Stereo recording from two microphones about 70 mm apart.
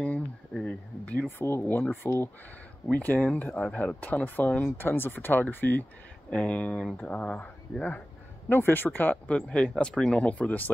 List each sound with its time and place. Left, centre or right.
0.0 s a sound: centre
1.7 s speech: left
4.7 s speech: left
8.5 s speech: left